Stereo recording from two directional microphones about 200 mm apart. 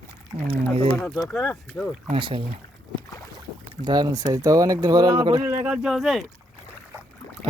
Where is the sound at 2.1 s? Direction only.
25° right (ahead or behind).